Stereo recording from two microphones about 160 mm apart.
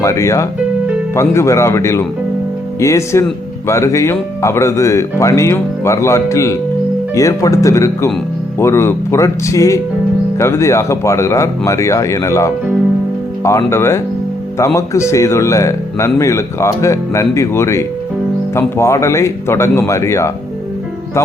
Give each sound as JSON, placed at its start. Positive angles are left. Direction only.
{"t": 0.0, "sound": "speech", "side_deg": 20}